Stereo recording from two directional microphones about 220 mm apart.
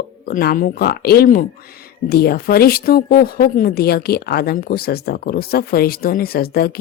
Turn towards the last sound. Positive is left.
turn(degrees=45)  # may be behind; listen again after turning